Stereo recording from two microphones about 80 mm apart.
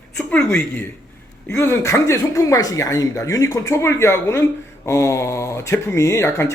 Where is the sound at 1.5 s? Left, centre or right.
Left.